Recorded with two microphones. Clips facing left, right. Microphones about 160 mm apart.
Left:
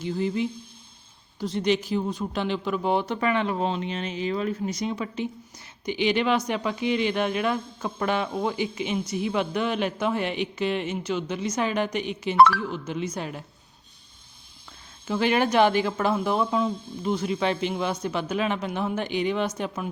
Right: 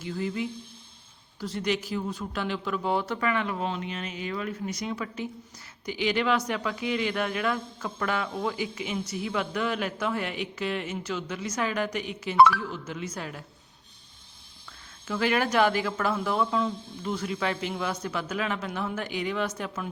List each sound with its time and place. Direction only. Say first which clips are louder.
0.0 s speech: left 5 dB; 20° left (ahead or behind)
15.0 s speech: left 3 dB; 25° left (ahead or behind)
16.7 s speech: left 4 dB; centre (ahead or behind)
17.0 s speech: left 5 dB; 20° left (ahead or behind)